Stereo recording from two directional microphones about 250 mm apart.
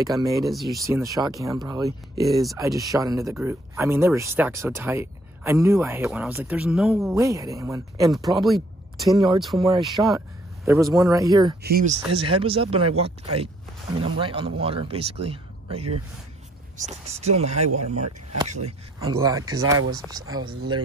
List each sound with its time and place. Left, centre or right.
0.0 s speech: centre
0.5 s speech: centre
0.7 s speech: centre
7.2 s speech: centre
8.3 s speech: centre
9.7 s speech: centre
11.6 s speech: right
12.1 s speech: right
17.6 s speech: right
18.5 s speech: right
18.9 s speech: centre